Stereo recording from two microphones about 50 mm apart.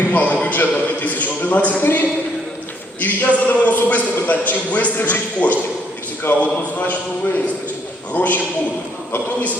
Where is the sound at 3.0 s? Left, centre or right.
Left.